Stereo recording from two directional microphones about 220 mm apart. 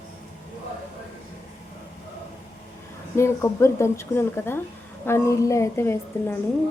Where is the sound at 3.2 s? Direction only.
10° left (ahead or behind).